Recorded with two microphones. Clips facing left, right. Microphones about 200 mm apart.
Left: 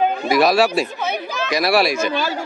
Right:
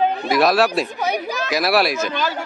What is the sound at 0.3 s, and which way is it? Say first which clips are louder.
Speech: left 2 dB; centre (ahead or behind).